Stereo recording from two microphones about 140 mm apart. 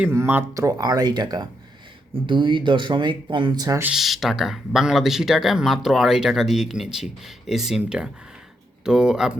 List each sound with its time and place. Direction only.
0.0 s speech: 15° right (ahead or behind)
3.8 s speech: centre (ahead or behind)